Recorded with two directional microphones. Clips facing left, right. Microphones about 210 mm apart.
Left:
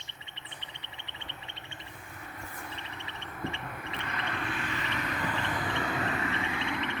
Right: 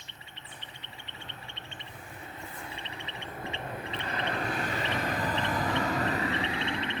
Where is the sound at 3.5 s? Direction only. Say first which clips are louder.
Right 3 dB; 30° right (ahead or behind).